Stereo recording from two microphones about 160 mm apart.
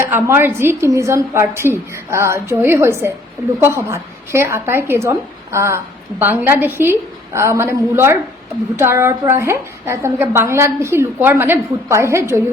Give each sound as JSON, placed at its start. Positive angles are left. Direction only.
{"t": 0.0, "sound": "a woman's voice", "side_deg": -15}